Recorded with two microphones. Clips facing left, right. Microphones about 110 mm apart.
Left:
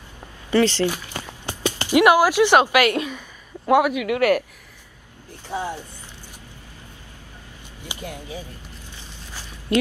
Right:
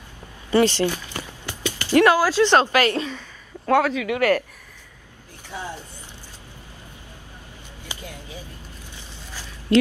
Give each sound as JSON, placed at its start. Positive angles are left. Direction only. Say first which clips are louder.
{"t": 0.5, "sound": "speech", "louder": "even", "side_deg": -15}
{"t": 1.5, "sound": "speech", "louder": "even", "side_deg": 15}
{"t": 5.5, "sound": "speech", "louder": "left 5 dB", "side_deg": 15}
{"t": 7.8, "sound": "a sound", "louder": "left 3 dB", "side_deg": 15}
{"t": 9.7, "sound": "speech", "louder": "right 3 dB", "side_deg": 20}